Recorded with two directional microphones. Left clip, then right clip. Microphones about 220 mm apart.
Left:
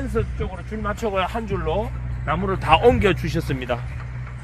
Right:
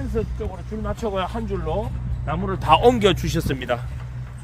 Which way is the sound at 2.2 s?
20° right (ahead or behind).